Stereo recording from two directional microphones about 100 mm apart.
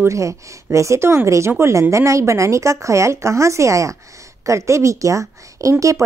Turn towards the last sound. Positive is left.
turn(degrees=-35)  # may be behind; listen again after turning